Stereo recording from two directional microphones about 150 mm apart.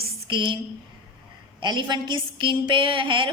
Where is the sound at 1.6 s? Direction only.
30° right (ahead or behind).